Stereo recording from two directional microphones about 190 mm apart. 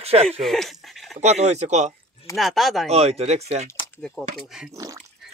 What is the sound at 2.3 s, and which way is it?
Speech, centre (ahead or behind).